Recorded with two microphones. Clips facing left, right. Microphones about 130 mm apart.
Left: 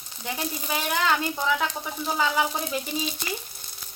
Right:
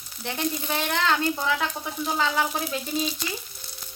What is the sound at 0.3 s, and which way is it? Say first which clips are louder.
Speech: right 2 dB; 5° left (ahead or behind).